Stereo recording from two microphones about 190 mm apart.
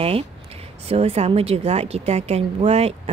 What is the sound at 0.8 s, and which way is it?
A woman's voice, 30° right (ahead or behind).